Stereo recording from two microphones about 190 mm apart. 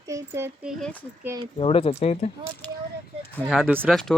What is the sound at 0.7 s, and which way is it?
Speech, 5° left (ahead or behind).